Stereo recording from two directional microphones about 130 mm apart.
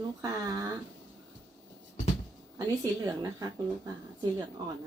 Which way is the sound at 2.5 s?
25° right (ahead or behind).